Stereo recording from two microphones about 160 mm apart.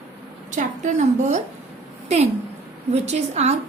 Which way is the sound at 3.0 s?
45° right (ahead or behind).